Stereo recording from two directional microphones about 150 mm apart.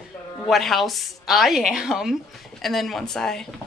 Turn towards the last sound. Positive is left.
turn(degrees=5)  # may be behind; listen again after turning